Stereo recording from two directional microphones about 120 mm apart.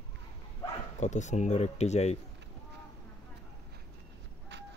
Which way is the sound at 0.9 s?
80° left.